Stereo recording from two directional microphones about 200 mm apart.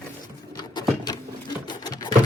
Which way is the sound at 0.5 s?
20° left (ahead or behind).